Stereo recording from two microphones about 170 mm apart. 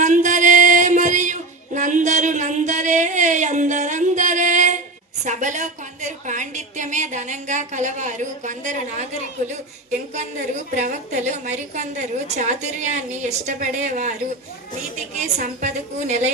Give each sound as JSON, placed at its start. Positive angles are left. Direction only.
{"t": 0.0, "sound": "music", "side_deg": -45}
{"t": 5.2, "sound": "a sound", "side_deg": -45}
{"t": 10.8, "sound": "a woman's voice", "side_deg": -45}